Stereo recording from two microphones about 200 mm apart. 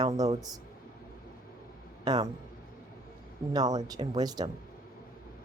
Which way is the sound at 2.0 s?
20° right (ahead or behind).